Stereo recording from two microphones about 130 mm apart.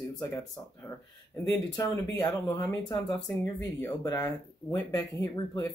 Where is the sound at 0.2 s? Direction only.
20° left (ahead or behind).